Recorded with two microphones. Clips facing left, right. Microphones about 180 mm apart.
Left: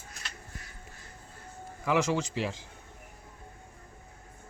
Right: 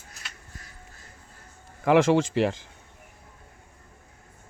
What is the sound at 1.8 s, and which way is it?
Speech, 55° right (ahead or behind).